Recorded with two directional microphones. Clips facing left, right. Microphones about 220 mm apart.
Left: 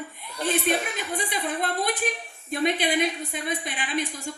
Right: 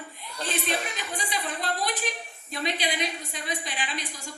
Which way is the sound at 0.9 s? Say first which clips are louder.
Left 4 dB; 55° left (ahead or behind).